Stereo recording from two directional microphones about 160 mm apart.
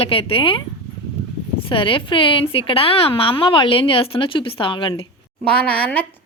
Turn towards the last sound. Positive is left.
turn(degrees=10)  # may be behind; listen again after turning